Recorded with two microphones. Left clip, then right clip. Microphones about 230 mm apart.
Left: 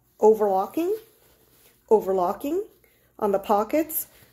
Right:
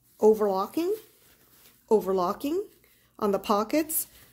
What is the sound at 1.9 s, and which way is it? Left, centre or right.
Speech, right.